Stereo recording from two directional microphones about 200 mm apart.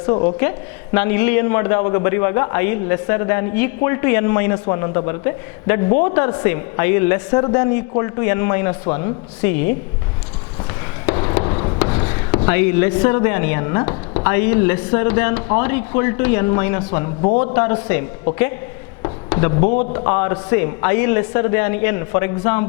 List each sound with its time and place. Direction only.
0.0 s a woman's voice: 25° left (ahead or behind)
11.0 s a sound: 15° left (ahead or behind)
12.5 s a man's voice: 10° left (ahead or behind)
19.0 s a sound: 15° left (ahead or behind)
19.6 s a man's voice: 45° left (ahead or behind)
19.9 s a man's voice: 15° left (ahead or behind)